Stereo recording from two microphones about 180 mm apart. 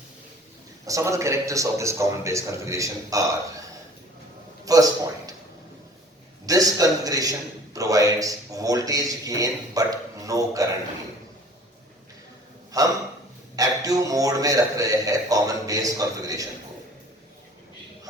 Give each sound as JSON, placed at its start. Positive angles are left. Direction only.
{"t": 0.9, "sound": "a man's voice", "side_deg": -15}
{"t": 4.6, "sound": "a sound", "side_deg": -20}
{"t": 6.4, "sound": "a man's voice", "side_deg": -20}
{"t": 12.7, "sound": "a man's voice", "side_deg": -20}